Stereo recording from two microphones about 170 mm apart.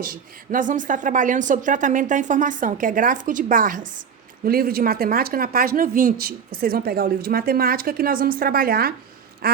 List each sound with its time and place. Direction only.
0.0 s a woman's voice: 55° right (ahead or behind)
4.4 s speech: 60° right (ahead or behind)